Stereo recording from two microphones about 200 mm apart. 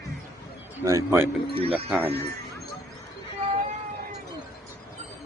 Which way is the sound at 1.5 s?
30° right (ahead or behind).